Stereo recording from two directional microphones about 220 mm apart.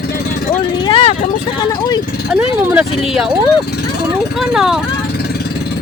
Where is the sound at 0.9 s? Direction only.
25° left (ahead or behind).